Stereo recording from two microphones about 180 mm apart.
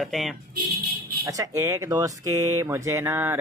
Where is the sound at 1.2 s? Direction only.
20° right (ahead or behind).